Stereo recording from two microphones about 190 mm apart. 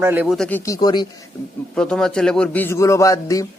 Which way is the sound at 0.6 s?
20° left (ahead or behind).